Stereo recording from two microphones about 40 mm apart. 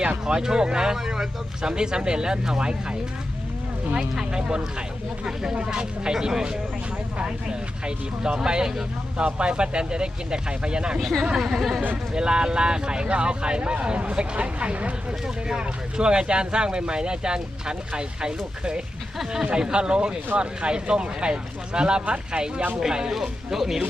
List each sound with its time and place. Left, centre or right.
0.0 s speech: right
7.9 s speech: right
12.1 s speech: right
15.4 s speech: centre